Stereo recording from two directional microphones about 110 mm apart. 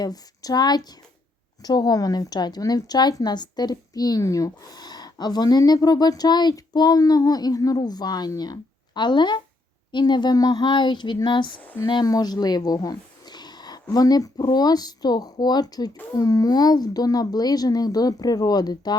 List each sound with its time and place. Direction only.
0.0 s a woman's voice: 35° left (ahead or behind)